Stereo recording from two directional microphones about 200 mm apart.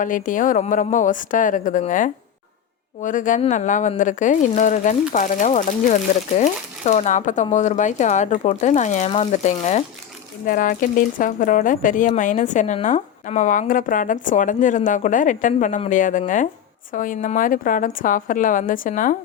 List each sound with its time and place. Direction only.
0.0 s speech: 40° left (ahead or behind)